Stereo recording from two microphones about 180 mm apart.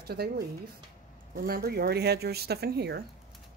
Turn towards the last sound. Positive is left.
turn(degrees=-65)  # may be behind; listen again after turning